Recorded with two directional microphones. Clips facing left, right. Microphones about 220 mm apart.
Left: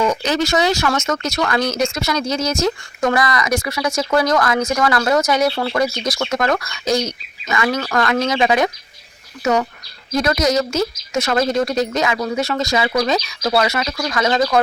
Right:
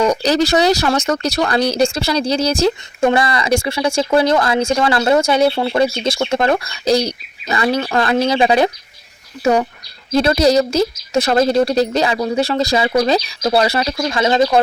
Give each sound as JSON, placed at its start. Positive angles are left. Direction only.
{"t": 0.0, "sound": "speech", "side_deg": -35}